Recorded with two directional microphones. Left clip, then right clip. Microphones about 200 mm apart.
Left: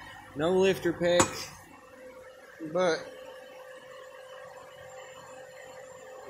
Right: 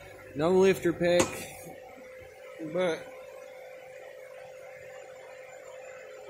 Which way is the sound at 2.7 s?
10° right (ahead or behind).